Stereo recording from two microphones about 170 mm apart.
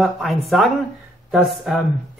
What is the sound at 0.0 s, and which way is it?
Speech, centre (ahead or behind).